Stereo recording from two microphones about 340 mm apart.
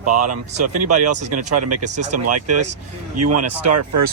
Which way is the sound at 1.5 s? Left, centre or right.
Right.